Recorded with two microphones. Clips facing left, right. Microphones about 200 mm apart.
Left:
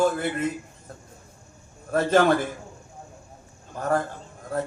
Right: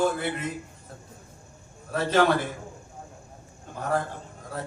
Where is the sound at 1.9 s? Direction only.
50° left (ahead or behind).